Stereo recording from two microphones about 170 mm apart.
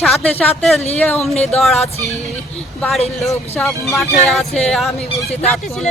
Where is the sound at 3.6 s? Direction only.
15° left (ahead or behind).